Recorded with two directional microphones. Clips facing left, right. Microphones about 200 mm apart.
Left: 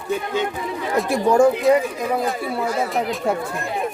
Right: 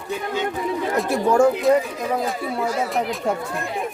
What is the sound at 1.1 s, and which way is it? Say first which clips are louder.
Speech: left 2 dB; 15° left (ahead or behind).